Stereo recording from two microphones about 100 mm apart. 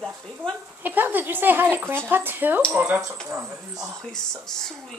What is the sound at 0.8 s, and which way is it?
Speech, 20° right (ahead or behind).